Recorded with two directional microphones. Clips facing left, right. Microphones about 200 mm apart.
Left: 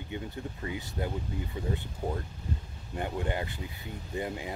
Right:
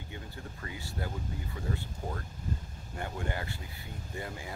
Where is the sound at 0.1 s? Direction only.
20° left (ahead or behind).